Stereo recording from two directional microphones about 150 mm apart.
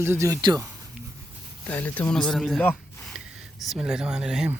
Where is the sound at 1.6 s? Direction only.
10° left (ahead or behind).